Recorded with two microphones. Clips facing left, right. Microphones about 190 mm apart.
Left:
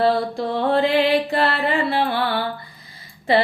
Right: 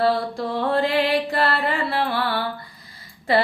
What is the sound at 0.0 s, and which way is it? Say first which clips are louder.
Mantra: left 2 dB; 25° left (ahead or behind).